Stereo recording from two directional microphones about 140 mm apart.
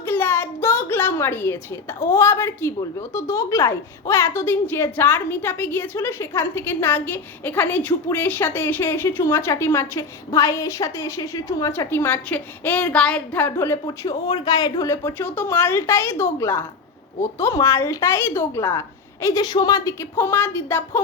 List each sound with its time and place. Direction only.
0.0 s a woman's voice: 15° left (ahead or behind)
13.8 s a woman's voice: 30° left (ahead or behind)